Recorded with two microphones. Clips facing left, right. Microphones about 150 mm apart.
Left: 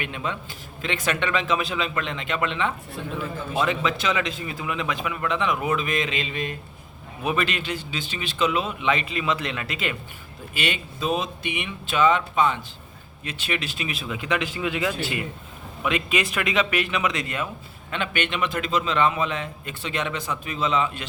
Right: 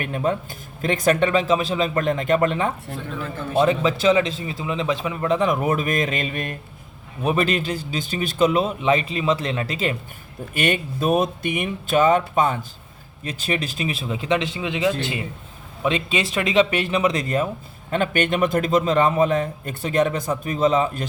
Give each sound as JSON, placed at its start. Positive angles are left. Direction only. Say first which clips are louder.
{"t": 0.0, "sound": "a man's voice", "louder": "right 7 dB", "side_deg": -45}
{"t": 7.3, "sound": "a man's voice", "louder": "right 5 dB", "side_deg": -40}
{"t": 10.5, "sound": "a man's voice", "louder": "right 6 dB", "side_deg": -50}